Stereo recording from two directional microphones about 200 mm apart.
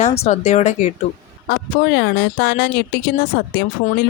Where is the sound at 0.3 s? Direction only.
35° left (ahead or behind).